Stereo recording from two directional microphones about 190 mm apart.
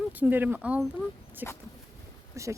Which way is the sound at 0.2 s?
10° right (ahead or behind).